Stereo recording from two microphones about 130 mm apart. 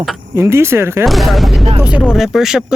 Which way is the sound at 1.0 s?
Centre (ahead or behind).